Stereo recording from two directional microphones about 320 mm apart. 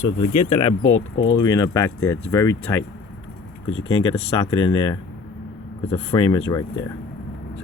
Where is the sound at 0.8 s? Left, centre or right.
Left.